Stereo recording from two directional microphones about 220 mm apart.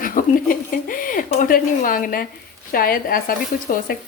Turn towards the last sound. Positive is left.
turn(degrees=40)  # may be behind; listen again after turning